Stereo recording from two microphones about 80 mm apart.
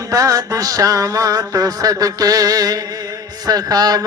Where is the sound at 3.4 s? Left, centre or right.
Right.